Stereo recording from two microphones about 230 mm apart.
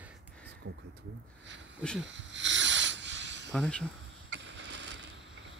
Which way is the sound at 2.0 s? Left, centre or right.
Right.